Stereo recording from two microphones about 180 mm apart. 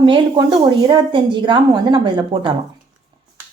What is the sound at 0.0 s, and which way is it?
A woman's voice, 25° right (ahead or behind).